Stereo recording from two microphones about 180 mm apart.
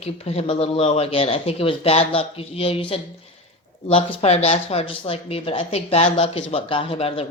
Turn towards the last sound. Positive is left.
turn(degrees=30)  # may be behind; listen again after turning